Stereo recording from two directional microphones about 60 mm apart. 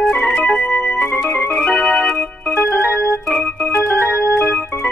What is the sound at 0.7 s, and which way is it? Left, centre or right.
Organ, left.